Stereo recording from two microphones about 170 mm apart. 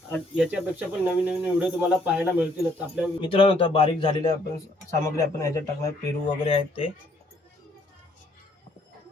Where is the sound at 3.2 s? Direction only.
30° left (ahead or behind).